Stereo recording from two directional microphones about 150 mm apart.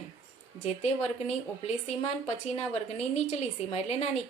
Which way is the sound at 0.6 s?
45° left (ahead or behind).